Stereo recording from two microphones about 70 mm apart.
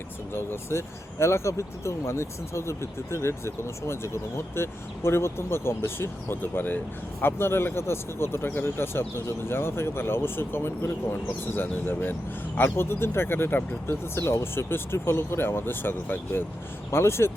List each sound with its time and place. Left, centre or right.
0.3 s speech: left